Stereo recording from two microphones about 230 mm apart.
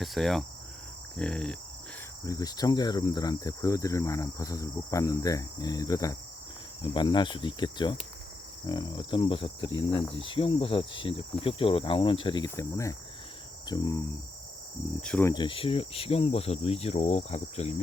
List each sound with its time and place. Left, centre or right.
0.0 s cricket: centre
2.2 s cricket: centre
15.0 s cricket: centre; by 17.7 s left